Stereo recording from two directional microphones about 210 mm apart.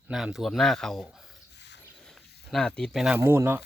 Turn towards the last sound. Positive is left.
turn(degrees=-10)  # may be behind; listen again after turning